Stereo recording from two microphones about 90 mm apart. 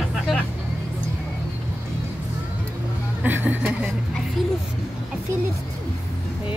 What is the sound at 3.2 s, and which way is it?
Speech, 20° right (ahead or behind).